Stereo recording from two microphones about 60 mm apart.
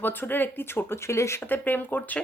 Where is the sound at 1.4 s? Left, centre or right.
Left.